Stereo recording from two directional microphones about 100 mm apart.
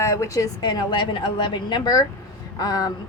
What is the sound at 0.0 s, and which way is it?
A woman's voice, 30° left (ahead or behind).